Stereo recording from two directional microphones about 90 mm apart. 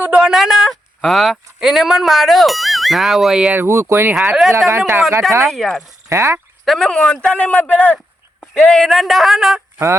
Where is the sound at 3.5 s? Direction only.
25° right (ahead or behind).